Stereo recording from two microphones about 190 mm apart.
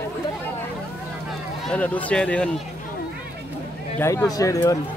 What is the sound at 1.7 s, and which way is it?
Speech, 5° left (ahead or behind).